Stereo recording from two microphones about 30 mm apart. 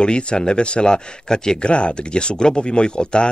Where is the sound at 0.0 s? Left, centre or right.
Left.